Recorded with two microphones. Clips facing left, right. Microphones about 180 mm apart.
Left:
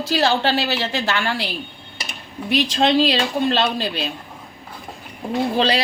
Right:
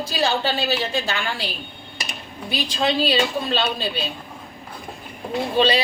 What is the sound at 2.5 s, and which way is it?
Speech, 75° left (ahead or behind).